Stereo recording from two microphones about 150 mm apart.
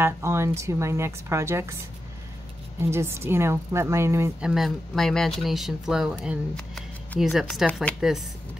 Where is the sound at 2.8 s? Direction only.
15° right (ahead or behind).